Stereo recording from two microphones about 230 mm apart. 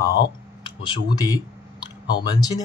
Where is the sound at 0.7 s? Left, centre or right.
Centre.